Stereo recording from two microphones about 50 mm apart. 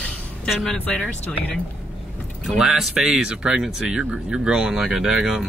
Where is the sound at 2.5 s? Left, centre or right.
Centre.